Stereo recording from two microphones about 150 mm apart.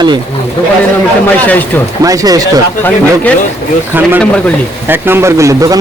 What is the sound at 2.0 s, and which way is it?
Speech, 25° right (ahead or behind).